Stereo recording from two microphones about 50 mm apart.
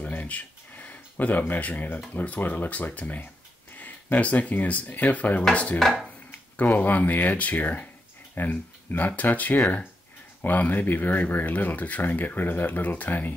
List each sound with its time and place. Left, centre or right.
0.0 s a sound: left
1.5 s speech: left
5.5 s dishes: left
6.5 s speech: left